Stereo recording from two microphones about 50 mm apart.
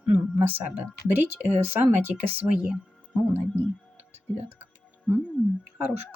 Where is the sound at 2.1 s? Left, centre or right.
Right.